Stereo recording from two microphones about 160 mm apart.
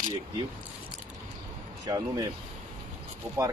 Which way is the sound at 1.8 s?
25° right (ahead or behind).